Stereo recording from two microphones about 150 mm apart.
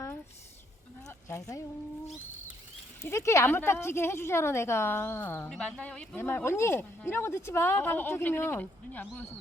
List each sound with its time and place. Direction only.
1.0 s speech: 20° left (ahead or behind)
3.0 s speech: 20° left (ahead or behind)